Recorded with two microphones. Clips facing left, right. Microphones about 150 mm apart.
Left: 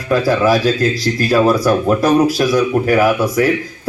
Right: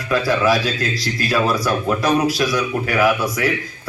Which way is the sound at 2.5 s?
40° left (ahead or behind).